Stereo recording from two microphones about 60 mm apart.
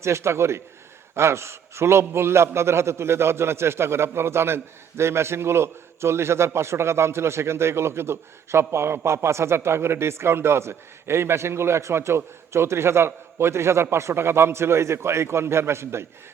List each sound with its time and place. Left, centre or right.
0.0 s a man's voice: right